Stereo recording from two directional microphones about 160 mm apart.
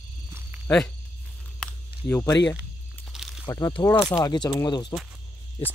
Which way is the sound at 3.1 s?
5° right (ahead or behind).